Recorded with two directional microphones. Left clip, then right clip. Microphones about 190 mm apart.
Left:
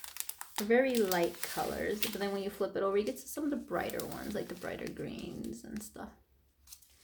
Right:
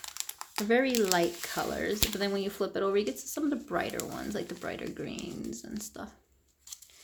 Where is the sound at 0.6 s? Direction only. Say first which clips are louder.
Right 2 dB; 20° right (ahead or behind).